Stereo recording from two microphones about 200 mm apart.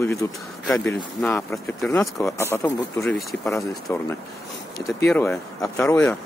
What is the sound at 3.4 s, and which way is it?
Speech, 15° left (ahead or behind).